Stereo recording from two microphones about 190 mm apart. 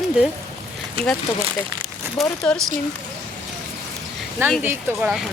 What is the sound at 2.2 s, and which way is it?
Speech, centre (ahead or behind).